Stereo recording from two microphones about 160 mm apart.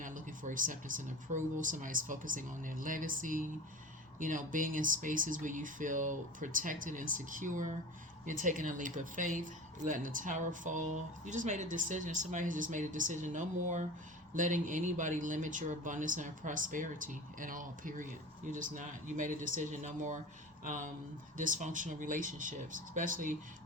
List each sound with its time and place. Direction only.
0.0 s speech: 55° right (ahead or behind)